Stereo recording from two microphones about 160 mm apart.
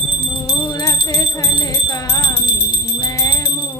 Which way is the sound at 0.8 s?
20° left (ahead or behind).